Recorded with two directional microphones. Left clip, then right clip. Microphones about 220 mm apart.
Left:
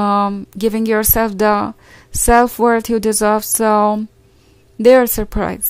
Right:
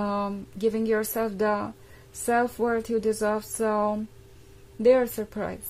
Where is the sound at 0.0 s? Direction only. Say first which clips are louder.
Left 13 dB; 40° left (ahead or behind).